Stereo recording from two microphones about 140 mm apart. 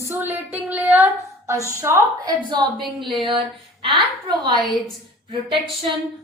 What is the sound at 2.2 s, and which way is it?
A woman's voice, 30° right (ahead or behind).